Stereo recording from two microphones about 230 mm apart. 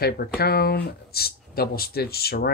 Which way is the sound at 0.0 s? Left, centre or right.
Left.